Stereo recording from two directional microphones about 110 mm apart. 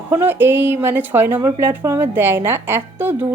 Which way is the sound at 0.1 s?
20° right (ahead or behind).